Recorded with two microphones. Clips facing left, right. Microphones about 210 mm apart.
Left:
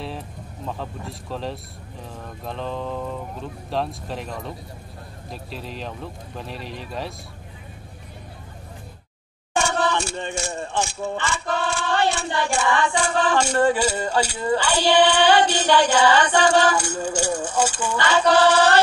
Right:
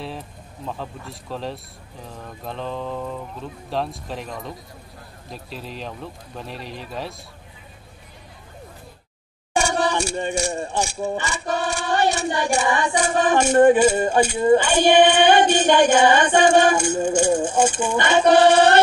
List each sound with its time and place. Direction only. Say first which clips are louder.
0.7 s speech: even; centre (ahead or behind)
9.5 s speech: right 1 dB; 15° right (ahead or behind)
14.9 s music: right 2 dB; 20° right (ahead or behind)